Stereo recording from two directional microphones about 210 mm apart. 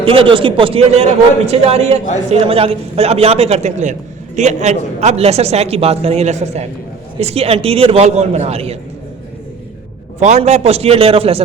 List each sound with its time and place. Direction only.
0.0 s a man's voice: 25° right (ahead or behind)
10.2 s a man's voice: 30° right (ahead or behind)